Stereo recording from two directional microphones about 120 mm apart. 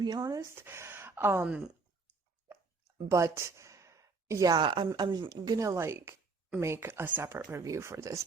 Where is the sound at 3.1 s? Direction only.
25° right (ahead or behind).